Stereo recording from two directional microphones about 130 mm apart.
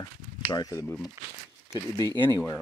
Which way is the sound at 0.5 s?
30° left (ahead or behind).